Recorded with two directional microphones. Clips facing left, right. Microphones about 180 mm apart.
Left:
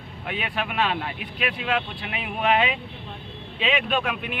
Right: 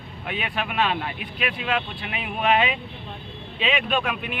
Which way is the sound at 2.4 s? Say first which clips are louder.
Right 1 dB; 10° right (ahead or behind).